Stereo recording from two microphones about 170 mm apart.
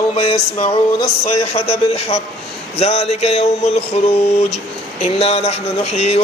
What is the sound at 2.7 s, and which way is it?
Speech, 40° left (ahead or behind).